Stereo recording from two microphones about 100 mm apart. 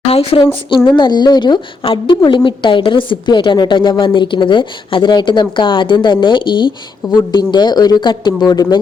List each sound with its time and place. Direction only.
0.1 s speech: 80° left; by 0.8 s 65° left (ahead or behind)
0.9 s a woman's voice: 45° left (ahead or behind)